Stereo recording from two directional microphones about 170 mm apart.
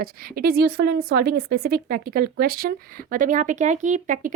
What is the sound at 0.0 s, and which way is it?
A woman's voice, 60° right (ahead or behind).